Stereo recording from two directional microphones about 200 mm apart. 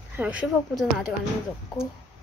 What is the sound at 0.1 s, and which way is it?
Speech, 5° right (ahead or behind).